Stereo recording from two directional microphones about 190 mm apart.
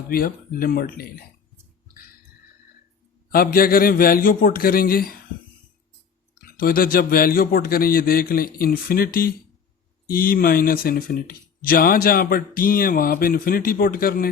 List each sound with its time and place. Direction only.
0.1 s speech: 50° left (ahead or behind)
3.3 s speech: 50° left (ahead or behind)
6.4 s speech: 50° left (ahead or behind)
10.1 s speech: 50° left (ahead or behind)